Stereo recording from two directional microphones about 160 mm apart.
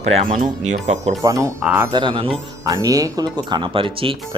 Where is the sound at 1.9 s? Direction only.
30° right (ahead or behind).